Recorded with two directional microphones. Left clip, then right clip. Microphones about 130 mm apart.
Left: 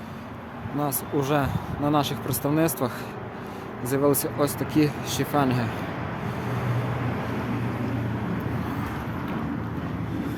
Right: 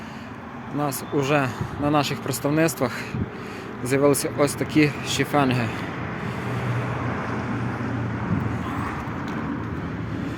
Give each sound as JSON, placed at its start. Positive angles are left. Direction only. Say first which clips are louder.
{"t": 0.8, "sound": "speech", "louder": "right 2 dB", "side_deg": 0}